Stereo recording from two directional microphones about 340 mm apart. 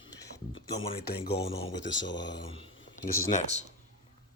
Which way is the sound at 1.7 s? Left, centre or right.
Left.